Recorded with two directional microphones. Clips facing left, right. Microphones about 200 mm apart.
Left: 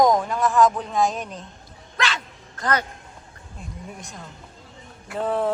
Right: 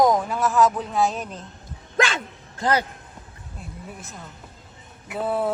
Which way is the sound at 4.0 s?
5° right (ahead or behind).